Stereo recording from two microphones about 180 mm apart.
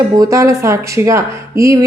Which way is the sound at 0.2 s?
20° right (ahead or behind).